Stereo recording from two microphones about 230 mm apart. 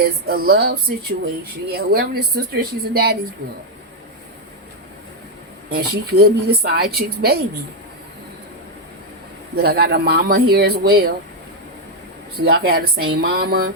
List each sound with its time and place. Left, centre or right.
0.0 s a woman's voice: right
5.7 s a woman's voice: right
9.6 s a woman's voice: right
12.7 s a woman's voice: right